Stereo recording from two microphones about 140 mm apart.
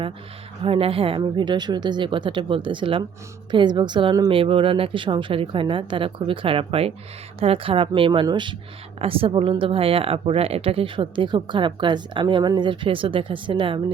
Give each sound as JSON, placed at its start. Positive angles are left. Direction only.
{"t": 0.6, "sound": "speech", "side_deg": -40}